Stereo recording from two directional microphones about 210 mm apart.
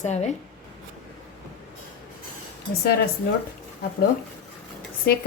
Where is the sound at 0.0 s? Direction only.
30° left (ahead or behind).